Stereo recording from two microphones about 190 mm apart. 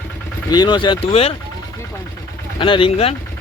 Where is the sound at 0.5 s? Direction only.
20° left (ahead or behind).